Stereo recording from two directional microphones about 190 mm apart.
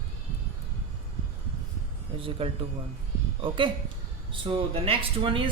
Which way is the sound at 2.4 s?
30° right (ahead or behind).